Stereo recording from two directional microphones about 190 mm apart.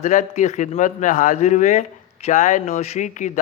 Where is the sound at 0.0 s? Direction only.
40° left (ahead or behind).